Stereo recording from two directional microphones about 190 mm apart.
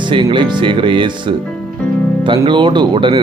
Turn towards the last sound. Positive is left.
turn(degrees=-25)  # may be behind; listen again after turning